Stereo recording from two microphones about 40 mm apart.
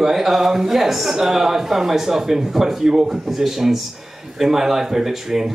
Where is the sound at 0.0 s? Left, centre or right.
Centre.